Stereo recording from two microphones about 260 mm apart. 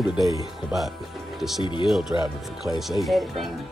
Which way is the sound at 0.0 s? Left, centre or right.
Centre.